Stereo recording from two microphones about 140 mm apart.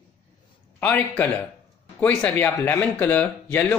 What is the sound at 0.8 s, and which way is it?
Speech, 10° left (ahead or behind).